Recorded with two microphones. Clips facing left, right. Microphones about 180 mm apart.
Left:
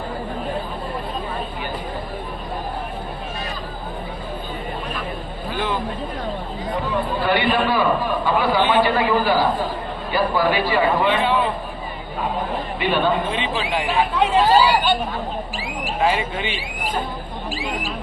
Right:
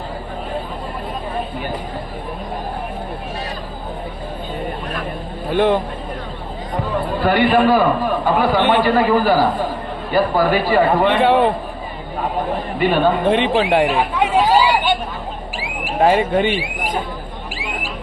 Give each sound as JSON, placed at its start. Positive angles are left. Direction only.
{"t": 5.5, "sound": "speech", "side_deg": -60}
{"t": 7.2, "sound": "a man's voice", "side_deg": -45}
{"t": 11.1, "sound": "speech", "side_deg": -65}
{"t": 13.2, "sound": "speech", "side_deg": -60}
{"t": 14.3, "sound": "chatter", "side_deg": -15}
{"t": 16.0, "sound": "a man's voice", "side_deg": -50}